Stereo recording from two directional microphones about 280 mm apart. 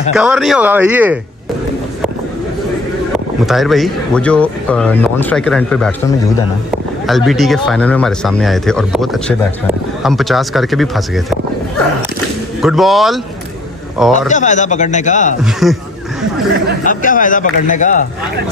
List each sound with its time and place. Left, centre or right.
0.1 s speech: centre
3.4 s speech: centre
7.1 s speech: centre
12.6 s speech: centre
14.1 s speech: left
15.6 s speech: centre
16.8 s speech: left